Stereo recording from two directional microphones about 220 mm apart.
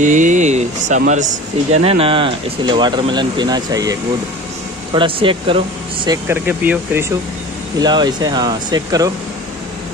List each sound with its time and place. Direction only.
0.0 s speech: 35° right (ahead or behind)
6.0 s speech: 10° right (ahead or behind)